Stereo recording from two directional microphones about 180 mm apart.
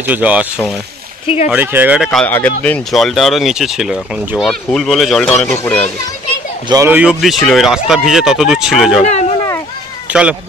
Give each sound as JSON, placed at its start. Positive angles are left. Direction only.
{"t": 0.0, "sound": "speech", "side_deg": -10}
{"t": 1.2, "sound": "speech", "side_deg": 35}
{"t": 1.5, "sound": "speech", "side_deg": -10}
{"t": 2.0, "sound": "a child's voice", "side_deg": 5}
{"t": 6.7, "sound": "speech", "side_deg": -15}
{"t": 10.0, "sound": "cat", "side_deg": -5}